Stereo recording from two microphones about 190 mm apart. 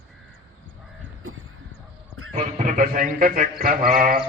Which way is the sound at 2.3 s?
35° right (ahead or behind).